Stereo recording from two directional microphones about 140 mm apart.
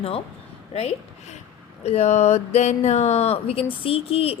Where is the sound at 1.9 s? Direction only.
50° left (ahead or behind).